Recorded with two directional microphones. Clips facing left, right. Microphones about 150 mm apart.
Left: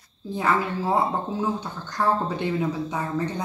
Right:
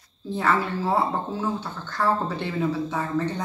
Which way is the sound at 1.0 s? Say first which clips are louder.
Left 1 dB; 15° left (ahead or behind).